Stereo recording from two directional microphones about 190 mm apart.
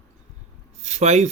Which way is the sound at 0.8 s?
35° right (ahead or behind).